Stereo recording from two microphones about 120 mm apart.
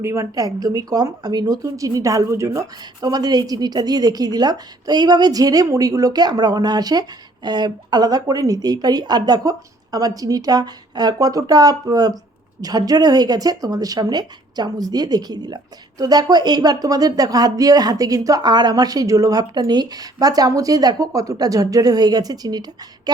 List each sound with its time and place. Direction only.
0.0 s a woman's voice: 25° right (ahead or behind)